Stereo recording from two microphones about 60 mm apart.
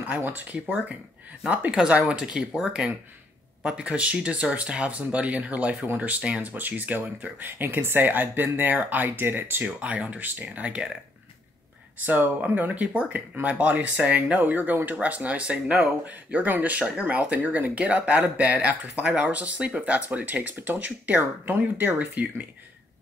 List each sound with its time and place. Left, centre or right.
0.1 s speech: right
12.1 s speech: right